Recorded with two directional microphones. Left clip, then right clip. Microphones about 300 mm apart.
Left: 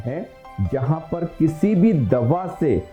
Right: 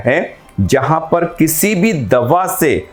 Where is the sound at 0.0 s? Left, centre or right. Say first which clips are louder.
Right 15 dB; centre.